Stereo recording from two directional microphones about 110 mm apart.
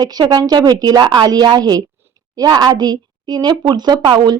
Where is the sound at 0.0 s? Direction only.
40° right (ahead or behind).